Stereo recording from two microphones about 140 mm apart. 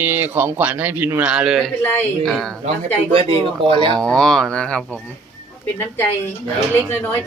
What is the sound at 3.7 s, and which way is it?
Speech, 40° right (ahead or behind).